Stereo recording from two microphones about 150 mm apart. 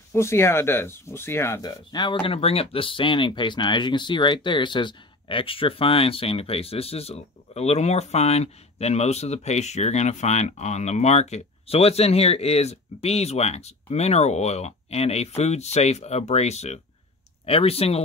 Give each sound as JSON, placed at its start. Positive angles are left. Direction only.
{"t": 0.1, "sound": "speech", "side_deg": 15}